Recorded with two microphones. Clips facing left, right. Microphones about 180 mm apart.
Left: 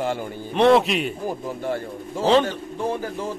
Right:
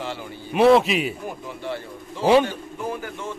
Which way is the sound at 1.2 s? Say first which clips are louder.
Left 5 dB; 45° left (ahead or behind).